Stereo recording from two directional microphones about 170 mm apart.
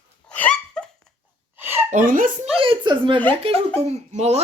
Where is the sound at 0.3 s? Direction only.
5° left (ahead or behind).